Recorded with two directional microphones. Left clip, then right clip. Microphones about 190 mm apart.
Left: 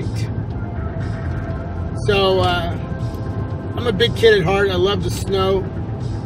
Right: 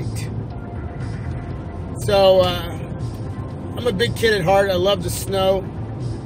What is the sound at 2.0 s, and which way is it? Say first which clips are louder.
Speech: right 3 dB; 20° right (ahead or behind).